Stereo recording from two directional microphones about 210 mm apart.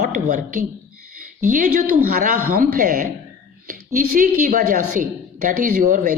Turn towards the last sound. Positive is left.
turn(degrees=-40)  # may be behind; listen again after turning